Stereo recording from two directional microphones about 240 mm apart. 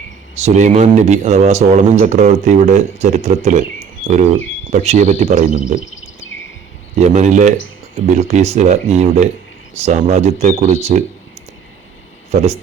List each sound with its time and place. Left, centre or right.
0.3 s speech: right
4.4 s bird: left
4.7 s speech: right
6.9 s speech: right
12.3 s speech: right